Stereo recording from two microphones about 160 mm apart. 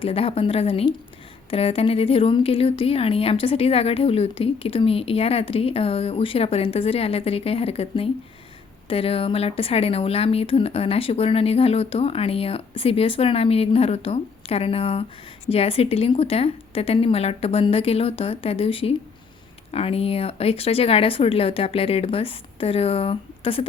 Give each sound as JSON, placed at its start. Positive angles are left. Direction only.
{"t": 0.0, "sound": "a woman's voice", "side_deg": 35}